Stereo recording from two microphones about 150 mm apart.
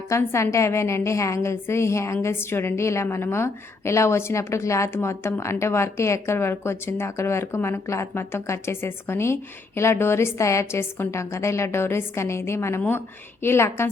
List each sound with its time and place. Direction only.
0.1 s a woman's voice: 15° left (ahead or behind)